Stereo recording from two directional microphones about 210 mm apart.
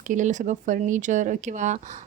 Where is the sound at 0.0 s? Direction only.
35° right (ahead or behind).